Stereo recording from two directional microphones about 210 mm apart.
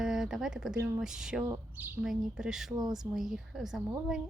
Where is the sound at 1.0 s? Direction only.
5° right (ahead or behind).